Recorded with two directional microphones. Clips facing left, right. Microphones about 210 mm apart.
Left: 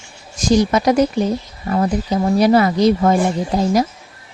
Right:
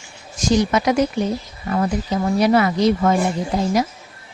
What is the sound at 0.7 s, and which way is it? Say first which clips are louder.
Speech: left 3 dB; 35° left (ahead or behind).